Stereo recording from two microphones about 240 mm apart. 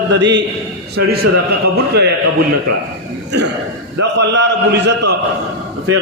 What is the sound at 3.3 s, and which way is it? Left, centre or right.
A man's voice, right.